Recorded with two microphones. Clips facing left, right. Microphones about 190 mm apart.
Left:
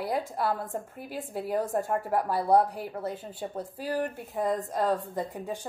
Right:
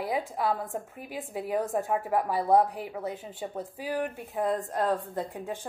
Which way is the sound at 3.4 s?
Centre (ahead or behind).